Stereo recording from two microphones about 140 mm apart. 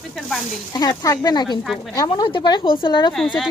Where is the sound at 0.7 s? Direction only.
30° left (ahead or behind).